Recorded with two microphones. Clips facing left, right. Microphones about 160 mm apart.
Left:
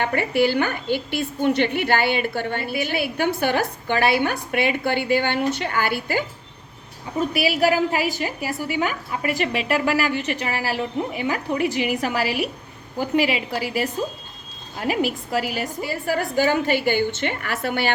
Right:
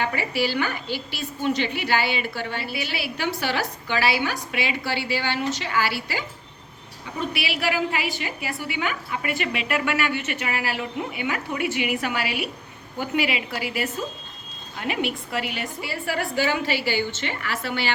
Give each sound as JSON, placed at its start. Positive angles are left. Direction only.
{"t": 0.0, "sound": "a woman's voice", "side_deg": 55}